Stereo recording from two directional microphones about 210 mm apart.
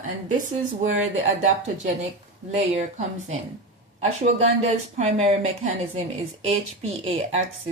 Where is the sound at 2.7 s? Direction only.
30° right (ahead or behind).